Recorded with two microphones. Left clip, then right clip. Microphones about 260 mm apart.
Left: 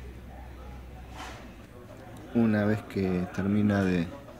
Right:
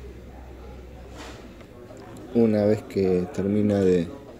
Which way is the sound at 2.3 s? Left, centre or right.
Centre.